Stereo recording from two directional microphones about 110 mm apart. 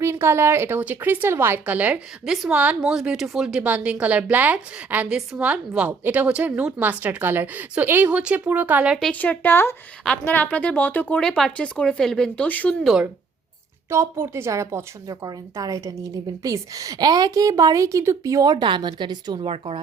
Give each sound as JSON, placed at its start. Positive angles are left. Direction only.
{"t": 0.0, "sound": "a woman's voice", "side_deg": -25}
{"t": 9.1, "sound": "speech", "side_deg": 15}
{"t": 12.8, "sound": "speech", "side_deg": -5}
{"t": 13.9, "sound": "a woman's voice", "side_deg": -25}
{"t": 18.5, "sound": "a woman's voice", "side_deg": -45}